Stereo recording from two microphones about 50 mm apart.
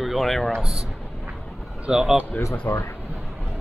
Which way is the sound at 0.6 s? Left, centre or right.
Centre.